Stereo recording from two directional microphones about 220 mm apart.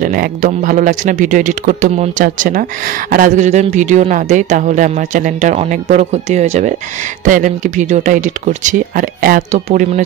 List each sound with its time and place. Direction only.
0.0 s speech: 40° right (ahead or behind)